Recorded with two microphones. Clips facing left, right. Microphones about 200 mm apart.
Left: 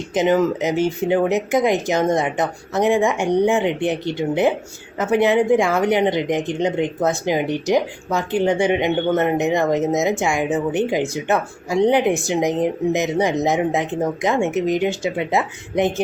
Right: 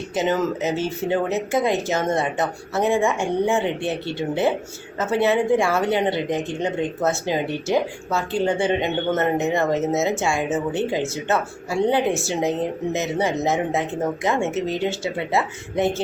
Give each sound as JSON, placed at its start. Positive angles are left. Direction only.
{"t": 0.1, "sound": "speech", "side_deg": 15}